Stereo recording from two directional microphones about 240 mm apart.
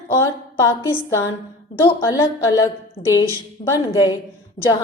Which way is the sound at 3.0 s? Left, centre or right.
Left.